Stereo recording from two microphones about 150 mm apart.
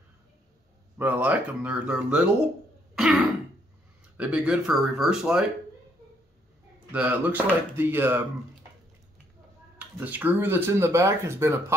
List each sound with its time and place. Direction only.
0.9 s speech: 10° right (ahead or behind)
6.9 s speech: 10° right (ahead or behind)
9.8 s speech: 10° right (ahead or behind)